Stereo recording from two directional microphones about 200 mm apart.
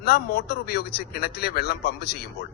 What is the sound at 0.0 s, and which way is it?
A man's voice, 50° left (ahead or behind).